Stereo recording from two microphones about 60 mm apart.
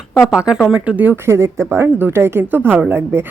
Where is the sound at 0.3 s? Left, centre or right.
Centre.